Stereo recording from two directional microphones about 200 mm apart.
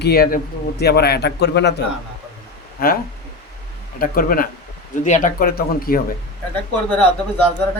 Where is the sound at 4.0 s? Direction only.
45° left (ahead or behind).